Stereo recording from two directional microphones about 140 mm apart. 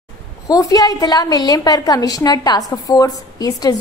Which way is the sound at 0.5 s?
25° left (ahead or behind).